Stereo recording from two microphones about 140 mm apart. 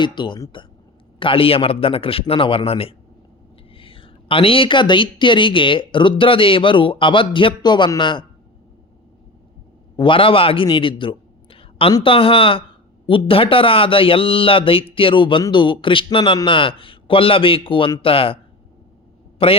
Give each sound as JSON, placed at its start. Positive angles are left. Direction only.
{"t": 0.0, "sound": "a man's voice", "side_deg": 35}
{"t": 10.0, "sound": "a man's voice", "side_deg": 40}
{"t": 19.4, "sound": "a man's voice", "side_deg": 40}